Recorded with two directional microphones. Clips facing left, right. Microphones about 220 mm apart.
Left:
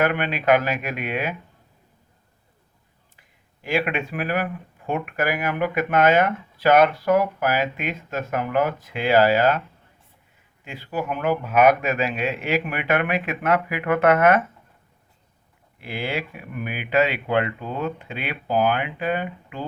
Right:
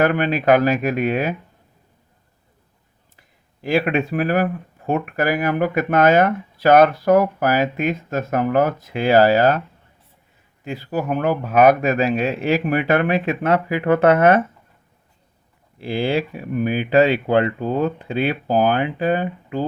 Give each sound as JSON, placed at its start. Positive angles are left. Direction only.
{"t": 0.0, "sound": "speech", "side_deg": -40}
{"t": 3.2, "sound": "speech", "side_deg": -40}
{"t": 15.8, "sound": "speech", "side_deg": -30}